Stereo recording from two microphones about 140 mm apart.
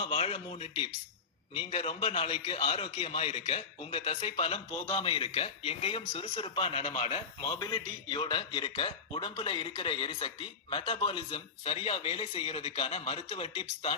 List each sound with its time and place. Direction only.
0.0 s a man's voice: 40° left (ahead or behind)